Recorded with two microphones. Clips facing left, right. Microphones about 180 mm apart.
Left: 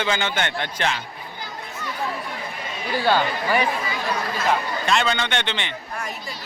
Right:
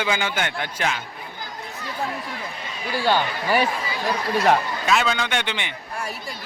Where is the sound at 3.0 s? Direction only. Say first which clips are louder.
Left 1 dB; 15° right (ahead or behind).